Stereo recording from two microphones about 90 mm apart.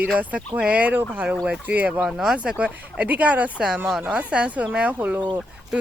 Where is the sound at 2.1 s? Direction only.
5° right (ahead or behind).